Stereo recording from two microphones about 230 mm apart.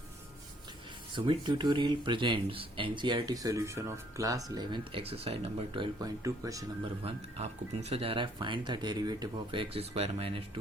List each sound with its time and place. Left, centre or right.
1.1 s speech: right
7.3 s speech: right